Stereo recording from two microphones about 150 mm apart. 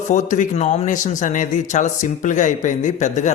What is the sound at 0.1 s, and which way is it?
Speech, 55° left (ahead or behind).